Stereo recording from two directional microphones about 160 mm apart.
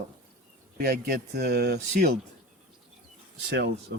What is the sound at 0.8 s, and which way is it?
Speech, 80° right.